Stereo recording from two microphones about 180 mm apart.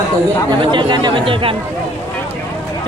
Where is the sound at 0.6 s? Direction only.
25° right (ahead or behind).